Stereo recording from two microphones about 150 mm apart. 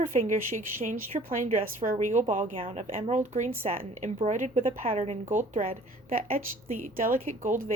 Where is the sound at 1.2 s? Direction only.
45° right (ahead or behind).